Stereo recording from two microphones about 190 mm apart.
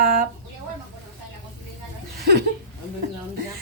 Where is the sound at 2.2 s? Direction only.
55° right (ahead or behind).